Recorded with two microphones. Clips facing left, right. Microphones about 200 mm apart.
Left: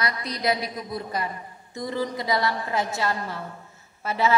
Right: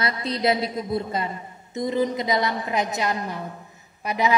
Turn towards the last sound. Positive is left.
turn(degrees=-15)  # may be behind; listen again after turning